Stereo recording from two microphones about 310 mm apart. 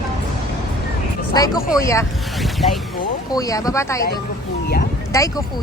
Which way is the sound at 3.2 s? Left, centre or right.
Centre.